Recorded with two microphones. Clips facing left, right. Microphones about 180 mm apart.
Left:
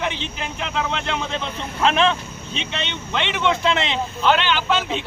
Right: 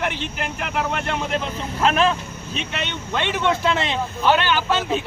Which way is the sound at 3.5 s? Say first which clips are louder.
Left 1 dB; 20° left (ahead or behind).